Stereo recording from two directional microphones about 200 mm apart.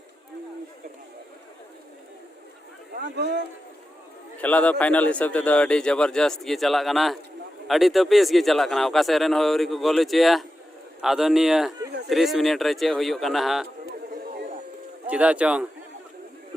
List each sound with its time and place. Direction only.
2.9 s speech: 55° right (ahead or behind)
4.4 s speech: 5° left (ahead or behind)
15.0 s speech: 5° right (ahead or behind)